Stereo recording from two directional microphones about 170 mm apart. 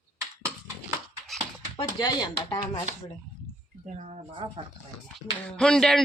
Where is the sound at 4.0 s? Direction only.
40° right (ahead or behind).